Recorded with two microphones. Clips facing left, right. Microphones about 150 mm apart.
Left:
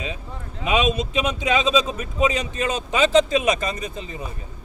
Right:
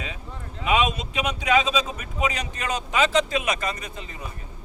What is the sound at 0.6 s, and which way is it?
A man's voice, 25° left (ahead or behind).